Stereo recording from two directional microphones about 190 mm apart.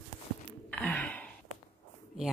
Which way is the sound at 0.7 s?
5° left (ahead or behind).